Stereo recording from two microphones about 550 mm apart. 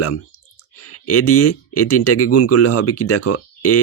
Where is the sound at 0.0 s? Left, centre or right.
Left.